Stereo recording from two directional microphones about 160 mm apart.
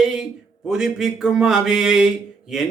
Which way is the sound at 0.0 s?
5° right (ahead or behind).